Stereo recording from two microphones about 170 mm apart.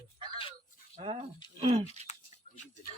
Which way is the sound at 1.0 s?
30° right (ahead or behind).